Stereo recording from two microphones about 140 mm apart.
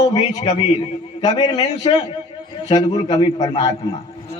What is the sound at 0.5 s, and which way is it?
A man's voice, 35° left (ahead or behind).